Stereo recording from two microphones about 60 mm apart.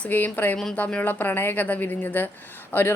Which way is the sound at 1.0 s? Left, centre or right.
Left.